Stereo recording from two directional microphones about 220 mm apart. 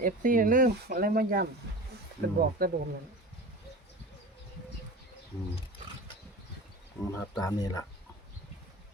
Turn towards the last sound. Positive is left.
turn(degrees=15)  # may be behind; listen again after turning